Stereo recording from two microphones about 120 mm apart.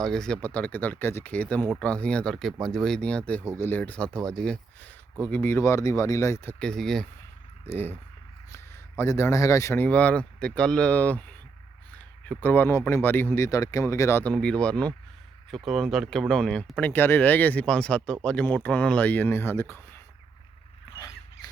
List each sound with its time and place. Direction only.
0.0 s speech: 5° left (ahead or behind)
5.3 s speech: 20° left (ahead or behind); by 7.1 s 5° left (ahead or behind)
7.7 s speech: 15° left (ahead or behind)
14.3 s speech: 5° left (ahead or behind)